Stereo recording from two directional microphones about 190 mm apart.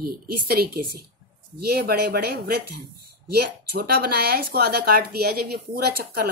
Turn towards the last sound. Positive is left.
turn(degrees=-55)  # may be behind; listen again after turning